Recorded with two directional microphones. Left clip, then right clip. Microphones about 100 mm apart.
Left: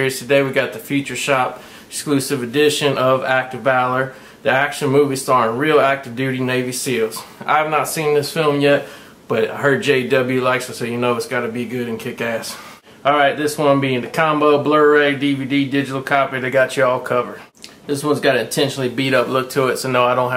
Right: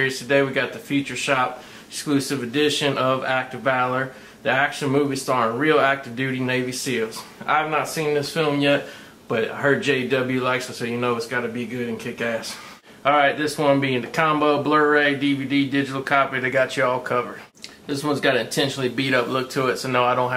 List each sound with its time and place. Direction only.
0.0 s speech: 30° left (ahead or behind)